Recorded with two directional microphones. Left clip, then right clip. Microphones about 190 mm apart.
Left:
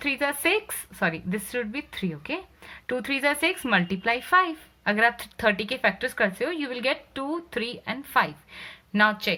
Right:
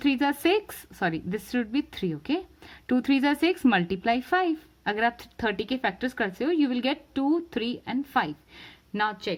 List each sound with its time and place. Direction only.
0.0 s speech: 50° right (ahead or behind)